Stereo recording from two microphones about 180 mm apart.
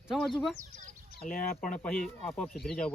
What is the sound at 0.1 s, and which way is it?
Speech, centre (ahead or behind).